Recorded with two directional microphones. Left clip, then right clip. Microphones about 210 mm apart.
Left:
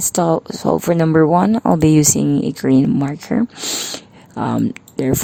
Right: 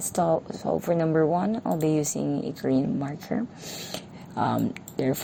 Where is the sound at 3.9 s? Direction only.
45° left (ahead or behind).